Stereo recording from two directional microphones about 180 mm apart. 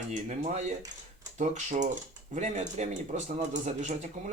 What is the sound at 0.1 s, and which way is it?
Speech, 40° right (ahead or behind).